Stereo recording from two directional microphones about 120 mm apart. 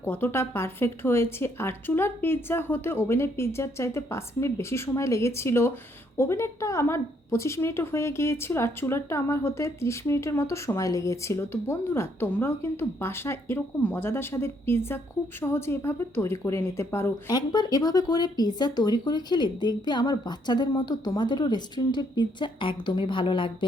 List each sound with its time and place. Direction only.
0.0 s speech: 20° left (ahead or behind)
17.2 s speech: 35° left (ahead or behind)